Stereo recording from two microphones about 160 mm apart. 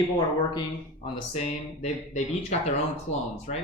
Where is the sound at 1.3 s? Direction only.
40° left (ahead or behind).